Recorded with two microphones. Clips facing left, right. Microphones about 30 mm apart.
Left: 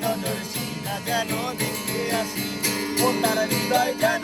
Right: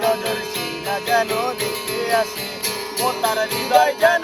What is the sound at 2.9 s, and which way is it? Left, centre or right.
Music, centre.